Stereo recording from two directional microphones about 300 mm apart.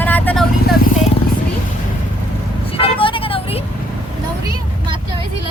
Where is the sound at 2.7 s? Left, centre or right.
Centre.